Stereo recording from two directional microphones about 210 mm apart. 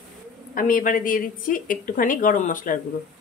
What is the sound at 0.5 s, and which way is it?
A woman's voice, 40° left (ahead or behind).